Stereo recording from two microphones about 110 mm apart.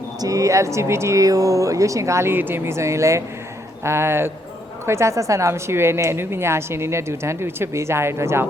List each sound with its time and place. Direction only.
0.2 s a woman's voice: 30° right (ahead or behind)